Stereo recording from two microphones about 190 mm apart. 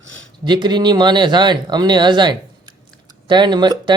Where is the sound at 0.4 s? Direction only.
25° right (ahead or behind).